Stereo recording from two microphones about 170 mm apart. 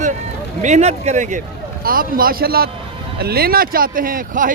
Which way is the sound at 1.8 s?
55° right (ahead or behind).